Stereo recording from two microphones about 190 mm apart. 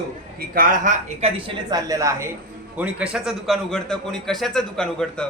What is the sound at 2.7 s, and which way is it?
A man's voice, 5° right (ahead or behind).